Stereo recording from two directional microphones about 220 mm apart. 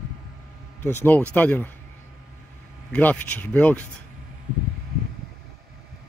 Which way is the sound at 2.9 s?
5° left (ahead or behind).